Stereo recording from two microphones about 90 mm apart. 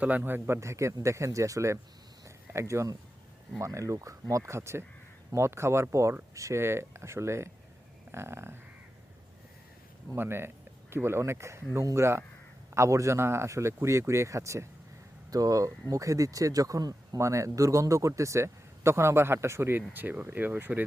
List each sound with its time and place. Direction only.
0.0 s a man's voice: 20° right (ahead or behind); by 1.8 s 35° right (ahead or behind)
2.2 s a sound: 30° right (ahead or behind)
3.6 s a man's voice: 35° right (ahead or behind)
10.1 s a man's voice: 25° right (ahead or behind)